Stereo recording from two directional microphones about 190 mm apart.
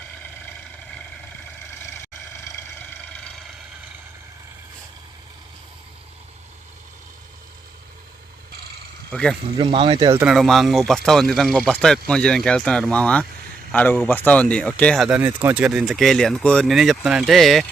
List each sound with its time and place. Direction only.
3.0 s vehicle: 5° left (ahead or behind)
9.1 s speech: 5° left (ahead or behind)
9.6 s speech: 25° right (ahead or behind)
10.2 s speech: centre (ahead or behind)